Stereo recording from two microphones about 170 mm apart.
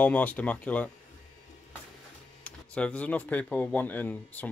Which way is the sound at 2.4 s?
10° left (ahead or behind).